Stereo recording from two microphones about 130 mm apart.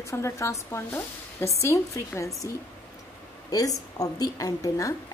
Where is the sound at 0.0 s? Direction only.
20° left (ahead or behind).